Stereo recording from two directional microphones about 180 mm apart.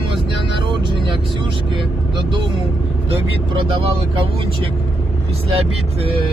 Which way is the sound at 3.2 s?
30° right (ahead or behind).